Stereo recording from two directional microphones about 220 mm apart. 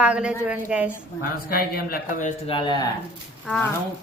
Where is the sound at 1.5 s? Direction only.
40° left (ahead or behind).